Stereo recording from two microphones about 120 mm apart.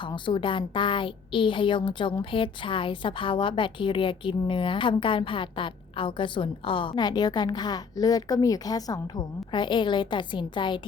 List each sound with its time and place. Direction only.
0.0 s a woman's voice: 45° left (ahead or behind)